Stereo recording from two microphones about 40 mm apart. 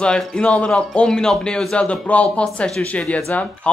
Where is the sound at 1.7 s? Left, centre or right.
Left.